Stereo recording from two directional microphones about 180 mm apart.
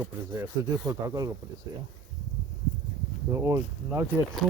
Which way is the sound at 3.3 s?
15° right (ahead or behind).